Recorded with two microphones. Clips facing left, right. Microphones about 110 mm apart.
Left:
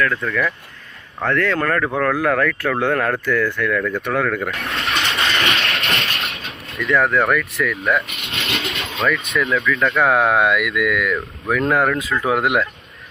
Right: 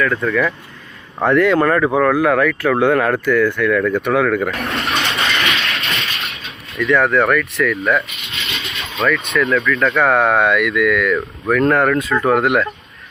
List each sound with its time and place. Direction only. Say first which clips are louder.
0.0 s speech: right 3 dB; 5° right (ahead or behind)
1.2 s speech: right 6 dB; 15° right (ahead or behind)
5.5 s a sound: even; 45° left (ahead or behind)
6.7 s speech: right 3 dB; centre (ahead or behind)
8.0 s vehicle: left 2 dB; 60° left (ahead or behind)
9.0 s speech: right 3 dB; 5° left (ahead or behind)